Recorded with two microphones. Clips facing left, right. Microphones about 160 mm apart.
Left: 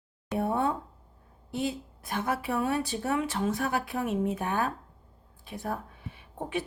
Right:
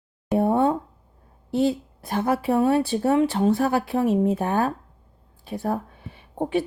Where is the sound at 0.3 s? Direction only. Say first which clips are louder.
Right 8 dB; 30° right (ahead or behind).